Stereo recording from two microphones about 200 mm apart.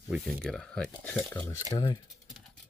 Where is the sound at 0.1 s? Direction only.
5° left (ahead or behind).